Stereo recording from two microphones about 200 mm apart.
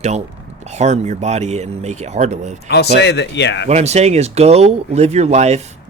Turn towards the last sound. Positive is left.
turn(degrees=-35)  # may be behind; listen again after turning